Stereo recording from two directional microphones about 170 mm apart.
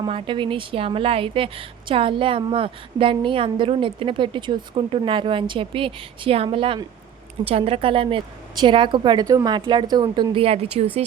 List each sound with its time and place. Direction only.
0.0 s a woman's voice: 30° right (ahead or behind)